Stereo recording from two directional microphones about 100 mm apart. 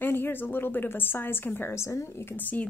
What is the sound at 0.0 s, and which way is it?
A woman's voice, 20° left (ahead or behind).